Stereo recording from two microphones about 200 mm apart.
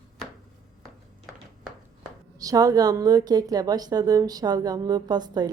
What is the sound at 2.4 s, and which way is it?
A woman's voice, 20° right (ahead or behind).